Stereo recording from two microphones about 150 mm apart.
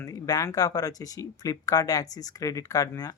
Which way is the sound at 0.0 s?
25° left (ahead or behind).